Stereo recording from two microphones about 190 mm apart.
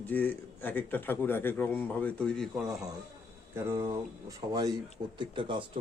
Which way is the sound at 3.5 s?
15° right (ahead or behind).